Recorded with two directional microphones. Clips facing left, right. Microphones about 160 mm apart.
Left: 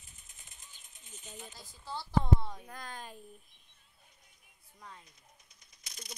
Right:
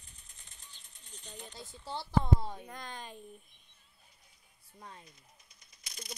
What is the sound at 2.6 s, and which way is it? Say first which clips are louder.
Speech: right 1 dB; 5° left (ahead or behind).